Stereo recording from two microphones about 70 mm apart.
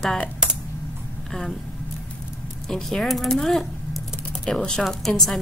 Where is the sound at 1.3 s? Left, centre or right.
Centre.